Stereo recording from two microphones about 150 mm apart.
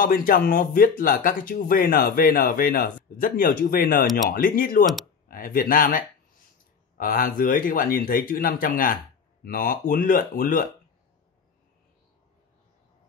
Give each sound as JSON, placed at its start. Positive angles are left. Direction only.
{"t": 0.0, "sound": "speech", "side_deg": 75}